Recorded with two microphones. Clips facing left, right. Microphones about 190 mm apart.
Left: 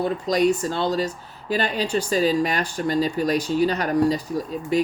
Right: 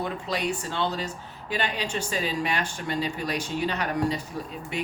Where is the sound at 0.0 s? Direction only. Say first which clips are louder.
Left 9 dB; 40° left (ahead or behind).